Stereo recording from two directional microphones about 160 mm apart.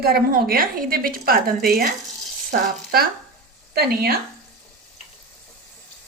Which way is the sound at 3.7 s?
75° right (ahead or behind).